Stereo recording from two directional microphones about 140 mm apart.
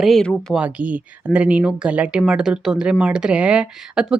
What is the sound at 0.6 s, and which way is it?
Speech, 10° right (ahead or behind).